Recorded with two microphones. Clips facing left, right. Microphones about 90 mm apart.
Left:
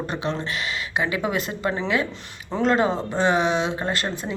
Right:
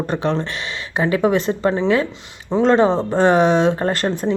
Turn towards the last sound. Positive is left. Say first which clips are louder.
# right 7 dB
turn(degrees=-40)  # may be behind; listen again after turning